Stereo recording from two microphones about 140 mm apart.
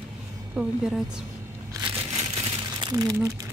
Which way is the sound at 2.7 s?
30° right (ahead or behind).